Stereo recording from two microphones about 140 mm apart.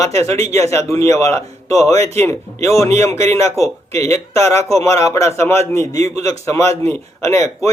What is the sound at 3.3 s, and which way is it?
Speech, 25° left (ahead or behind).